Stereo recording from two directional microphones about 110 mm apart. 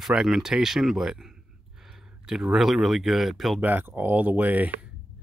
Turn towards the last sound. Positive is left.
turn(degrees=-15)  # may be behind; listen again after turning